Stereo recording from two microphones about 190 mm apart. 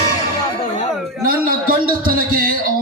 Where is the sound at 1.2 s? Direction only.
50° right (ahead or behind).